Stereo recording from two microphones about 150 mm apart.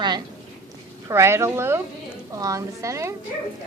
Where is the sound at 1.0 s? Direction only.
20° right (ahead or behind).